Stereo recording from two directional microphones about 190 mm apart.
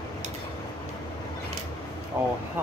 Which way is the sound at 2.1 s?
10° right (ahead or behind).